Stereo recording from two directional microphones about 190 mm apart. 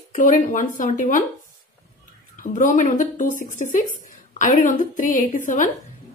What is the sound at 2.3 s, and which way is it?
A woman's voice, 45° left (ahead or behind).